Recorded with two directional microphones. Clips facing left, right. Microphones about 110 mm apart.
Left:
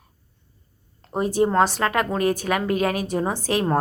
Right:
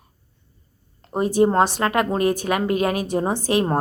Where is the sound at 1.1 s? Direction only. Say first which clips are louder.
Right 2 dB; 20° right (ahead or behind).